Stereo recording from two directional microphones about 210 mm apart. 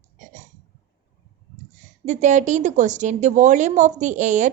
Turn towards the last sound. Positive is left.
turn(degrees=-35)  # may be behind; listen again after turning